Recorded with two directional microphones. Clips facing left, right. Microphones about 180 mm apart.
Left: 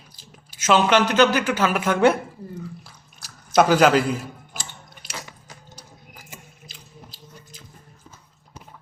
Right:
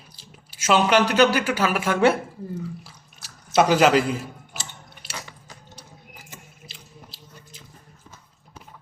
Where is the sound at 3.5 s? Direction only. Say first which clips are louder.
Left 1 dB; centre (ahead or behind).